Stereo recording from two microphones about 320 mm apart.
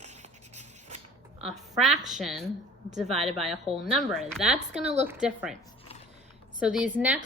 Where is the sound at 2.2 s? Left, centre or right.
Centre.